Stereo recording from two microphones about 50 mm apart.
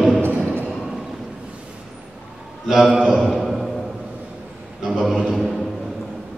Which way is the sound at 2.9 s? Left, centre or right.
Right.